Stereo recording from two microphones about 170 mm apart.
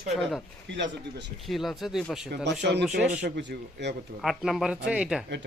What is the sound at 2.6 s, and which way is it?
Speech, 90° right.